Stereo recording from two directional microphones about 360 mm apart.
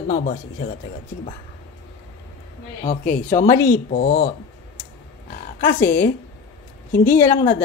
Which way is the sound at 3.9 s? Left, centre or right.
Left.